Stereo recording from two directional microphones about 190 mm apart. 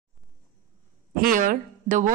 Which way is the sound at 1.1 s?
45° right (ahead or behind).